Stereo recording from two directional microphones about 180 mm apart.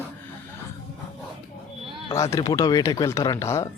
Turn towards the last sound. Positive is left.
turn(degrees=20)  # may be behind; listen again after turning